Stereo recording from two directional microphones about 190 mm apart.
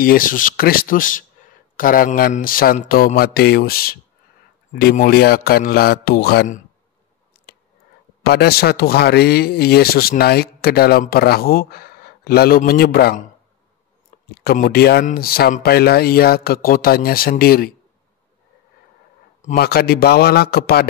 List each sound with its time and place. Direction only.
0.0 s speech: 45° left (ahead or behind)
8.2 s speech: 55° left (ahead or behind)
14.4 s speech: 55° left (ahead or behind)
19.5 s speech: 55° left (ahead or behind)